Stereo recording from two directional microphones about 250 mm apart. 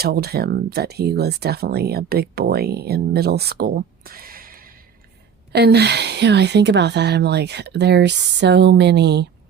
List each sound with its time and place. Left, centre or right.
0.0 s speech: right